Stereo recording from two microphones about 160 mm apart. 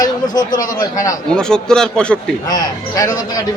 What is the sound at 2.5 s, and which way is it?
Speech, 25° left (ahead or behind).